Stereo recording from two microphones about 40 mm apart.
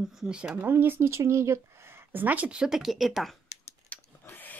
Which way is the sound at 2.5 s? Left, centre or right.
Right.